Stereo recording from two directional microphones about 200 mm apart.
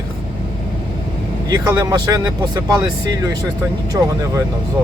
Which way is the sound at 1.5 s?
20° right (ahead or behind).